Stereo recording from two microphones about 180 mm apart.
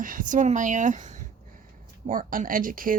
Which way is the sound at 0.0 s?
50° right (ahead or behind).